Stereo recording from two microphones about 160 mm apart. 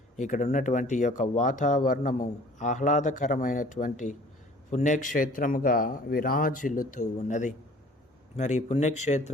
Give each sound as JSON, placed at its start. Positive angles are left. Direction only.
{"t": 0.2, "sound": "a man's voice", "side_deg": 50}